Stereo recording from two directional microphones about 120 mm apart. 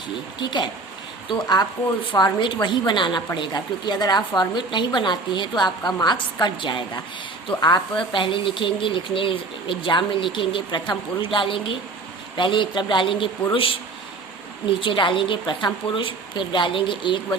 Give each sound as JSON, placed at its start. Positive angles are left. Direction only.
{"t": 0.3, "sound": "a woman's voice", "side_deg": 40}